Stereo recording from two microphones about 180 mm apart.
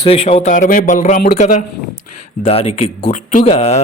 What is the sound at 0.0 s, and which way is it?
A man's voice, 30° left (ahead or behind).